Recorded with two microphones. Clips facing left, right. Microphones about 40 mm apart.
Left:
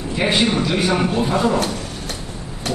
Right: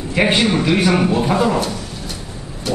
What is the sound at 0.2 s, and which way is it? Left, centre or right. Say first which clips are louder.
Speech: right 3 dB; right.